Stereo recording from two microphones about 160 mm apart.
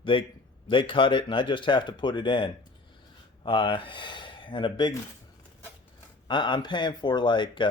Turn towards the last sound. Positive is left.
turn(degrees=30)  # may be behind; listen again after turning